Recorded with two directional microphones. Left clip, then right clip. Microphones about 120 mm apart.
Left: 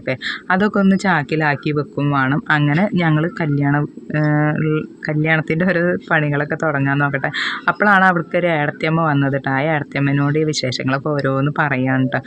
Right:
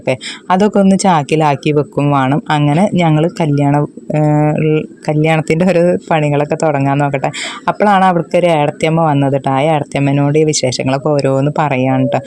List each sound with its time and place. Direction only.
0.1 s speech: 35° right (ahead or behind)